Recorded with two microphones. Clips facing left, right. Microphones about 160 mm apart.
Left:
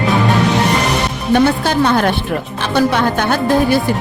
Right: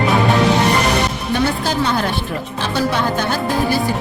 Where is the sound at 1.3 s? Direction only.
60° left (ahead or behind).